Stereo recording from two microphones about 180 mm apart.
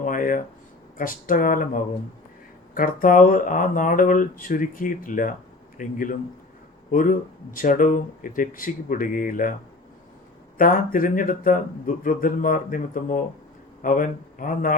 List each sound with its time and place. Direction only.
0.0 s a man's voice: 50° left (ahead or behind)
10.6 s speech: 50° left (ahead or behind)